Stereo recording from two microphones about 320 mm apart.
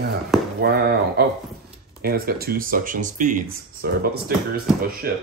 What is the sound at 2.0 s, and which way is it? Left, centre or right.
Speech, right.